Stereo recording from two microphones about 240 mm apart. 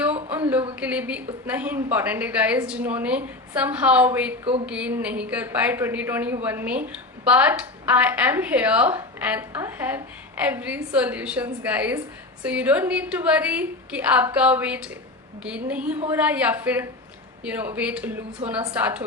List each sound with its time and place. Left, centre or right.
0.8 s a woman's voice: centre